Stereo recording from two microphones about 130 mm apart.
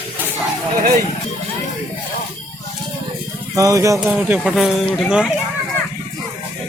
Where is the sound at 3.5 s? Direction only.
25° right (ahead or behind).